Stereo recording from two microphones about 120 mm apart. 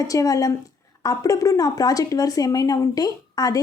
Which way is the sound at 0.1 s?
30° left (ahead or behind).